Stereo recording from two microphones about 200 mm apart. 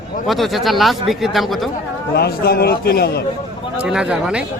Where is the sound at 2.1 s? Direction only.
50° left (ahead or behind).